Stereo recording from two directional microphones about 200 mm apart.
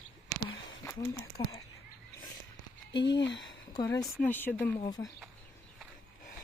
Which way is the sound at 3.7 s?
15° left (ahead or behind).